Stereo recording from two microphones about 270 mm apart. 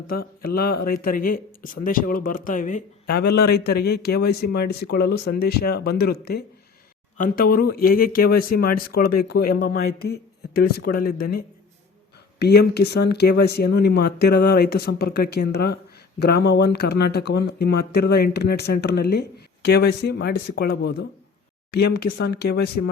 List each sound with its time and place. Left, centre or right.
0.1 s mantra: left
0.5 s speech: left